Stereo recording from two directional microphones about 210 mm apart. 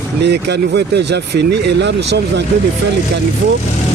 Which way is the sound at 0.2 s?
50° right (ahead or behind).